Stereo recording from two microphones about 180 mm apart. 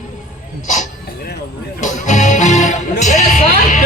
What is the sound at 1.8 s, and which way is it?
Music, 45° left (ahead or behind).